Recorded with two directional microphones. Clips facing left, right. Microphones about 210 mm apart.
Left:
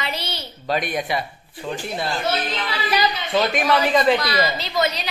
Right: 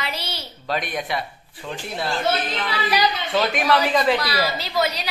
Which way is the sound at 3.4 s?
Centre (ahead or behind).